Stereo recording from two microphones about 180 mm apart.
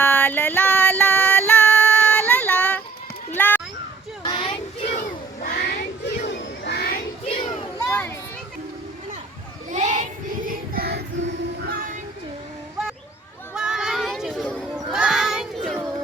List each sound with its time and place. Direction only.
0.0 s female singing: 10° left (ahead or behind)
3.3 s a sound: 10° left (ahead or behind)
4.2 s child singing: 25° left (ahead or behind)
5.4 s a sound: 55° left (ahead or behind)
7.3 s children playing: 25° left (ahead or behind)
9.6 s child singing: 40° right (ahead or behind); by 11.0 s 55° right (ahead or behind)
11.6 s music: 55° right (ahead or behind)
13.5 s a sound: 5° right (ahead or behind)
14.9 s child singing: 5° right (ahead or behind)